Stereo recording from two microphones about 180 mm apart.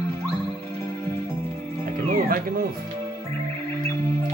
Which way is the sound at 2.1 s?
55° right (ahead or behind).